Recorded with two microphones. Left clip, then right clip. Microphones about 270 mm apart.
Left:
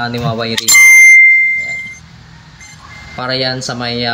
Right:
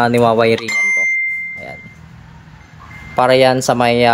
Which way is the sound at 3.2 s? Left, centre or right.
Centre.